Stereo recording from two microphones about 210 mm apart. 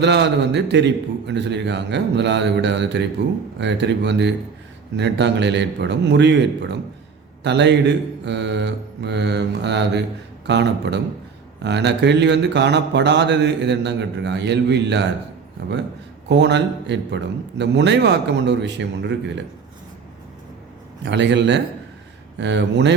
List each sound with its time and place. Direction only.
0.0 s mantra: 55° right (ahead or behind)
16.3 s mantra: 55° right (ahead or behind)
21.0 s mantra: 55° right (ahead or behind)